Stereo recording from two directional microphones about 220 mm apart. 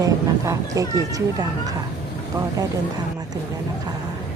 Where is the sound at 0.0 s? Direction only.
15° right (ahead or behind).